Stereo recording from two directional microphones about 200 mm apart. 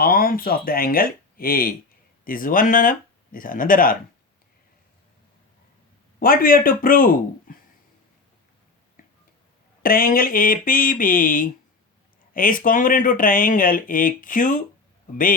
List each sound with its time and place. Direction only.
0.0 s speech: 45° left (ahead or behind)
6.1 s speech: 45° left (ahead or behind)
9.0 s a sound: 45° left (ahead or behind)
9.8 s speech: 45° left (ahead or behind)